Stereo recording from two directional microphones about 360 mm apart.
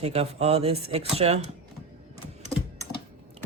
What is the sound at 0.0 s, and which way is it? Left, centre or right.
Speech, centre.